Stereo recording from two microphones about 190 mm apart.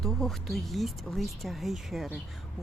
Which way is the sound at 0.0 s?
Centre (ahead or behind).